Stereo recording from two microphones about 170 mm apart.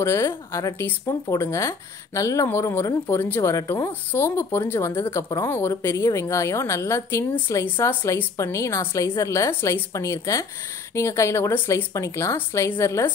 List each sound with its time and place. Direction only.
0.0 s speech: 15° left (ahead or behind)